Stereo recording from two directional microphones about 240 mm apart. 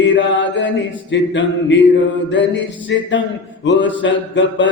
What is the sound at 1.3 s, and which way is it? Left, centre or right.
Speech, left.